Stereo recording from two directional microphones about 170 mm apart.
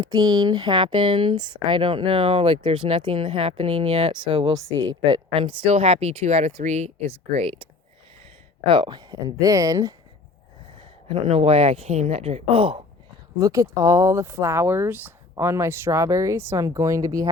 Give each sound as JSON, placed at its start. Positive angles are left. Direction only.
{"t": 0.0, "sound": "speech", "side_deg": -20}
{"t": 10.8, "sound": "speech", "side_deg": -35}
{"t": 13.4, "sound": "speech", "side_deg": -20}